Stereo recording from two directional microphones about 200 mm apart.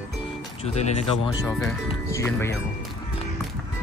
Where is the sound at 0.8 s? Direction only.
35° left (ahead or behind).